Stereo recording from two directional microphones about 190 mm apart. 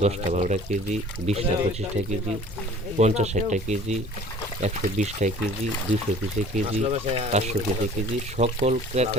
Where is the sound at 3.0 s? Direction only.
35° right (ahead or behind).